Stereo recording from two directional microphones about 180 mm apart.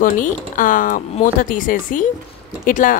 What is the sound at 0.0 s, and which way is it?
Speech, 50° left (ahead or behind).